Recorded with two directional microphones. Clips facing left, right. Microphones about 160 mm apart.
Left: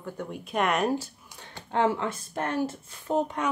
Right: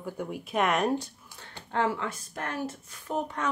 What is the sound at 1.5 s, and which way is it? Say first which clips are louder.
Speech: left 3 dB; 20° left (ahead or behind).